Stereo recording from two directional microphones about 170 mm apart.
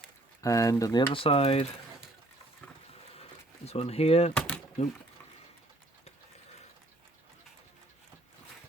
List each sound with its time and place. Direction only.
0.4 s speech: 20° left (ahead or behind)
1.1 s speech: 30° left (ahead or behind)
3.6 s speech: 35° left (ahead or behind)
4.4 s door: 5° left (ahead or behind)